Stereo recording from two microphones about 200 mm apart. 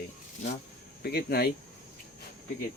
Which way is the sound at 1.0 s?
50° left (ahead or behind).